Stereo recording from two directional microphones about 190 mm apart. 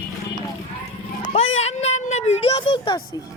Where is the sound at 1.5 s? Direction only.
35° left (ahead or behind).